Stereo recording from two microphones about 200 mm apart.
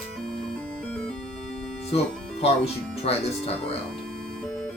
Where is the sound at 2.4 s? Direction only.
30° left (ahead or behind).